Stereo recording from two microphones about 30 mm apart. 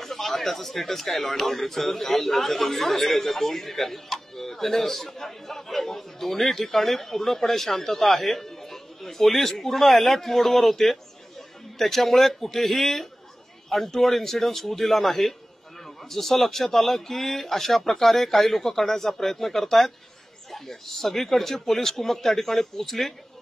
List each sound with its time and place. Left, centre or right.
0.0 s speech: centre